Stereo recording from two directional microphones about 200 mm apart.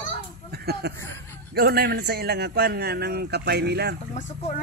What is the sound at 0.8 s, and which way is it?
A man's voice, 55° right (ahead or behind).